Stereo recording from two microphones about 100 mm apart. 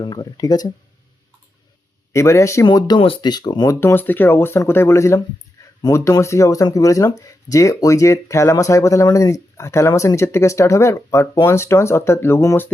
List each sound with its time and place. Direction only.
0.0 s speech: 40° left (ahead or behind)
2.1 s speech: 30° left (ahead or behind)
2.6 s speech: 45° left (ahead or behind)
3.7 s speech: 25° left (ahead or behind)
5.6 s a sound: 35° left (ahead or behind)
5.9 s speech: 30° left (ahead or behind)